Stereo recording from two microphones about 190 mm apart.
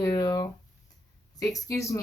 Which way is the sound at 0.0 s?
15° left (ahead or behind).